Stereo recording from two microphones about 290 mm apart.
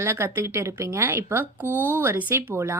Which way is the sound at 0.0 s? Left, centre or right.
Centre.